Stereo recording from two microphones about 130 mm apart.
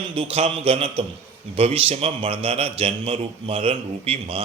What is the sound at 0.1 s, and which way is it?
A man's voice, 45° right (ahead or behind).